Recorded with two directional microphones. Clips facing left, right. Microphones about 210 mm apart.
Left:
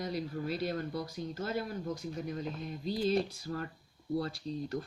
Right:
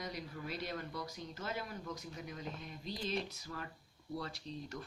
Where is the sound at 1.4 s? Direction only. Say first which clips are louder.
Left 7 dB; 35° left (ahead or behind).